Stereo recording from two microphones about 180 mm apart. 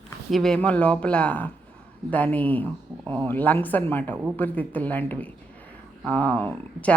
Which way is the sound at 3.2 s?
10° left (ahead or behind).